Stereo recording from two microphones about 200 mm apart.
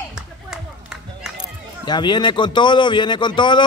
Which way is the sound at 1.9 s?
20° left (ahead or behind).